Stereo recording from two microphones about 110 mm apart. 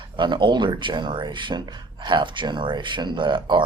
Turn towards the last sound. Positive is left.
turn(degrees=-45)  # may be behind; listen again after turning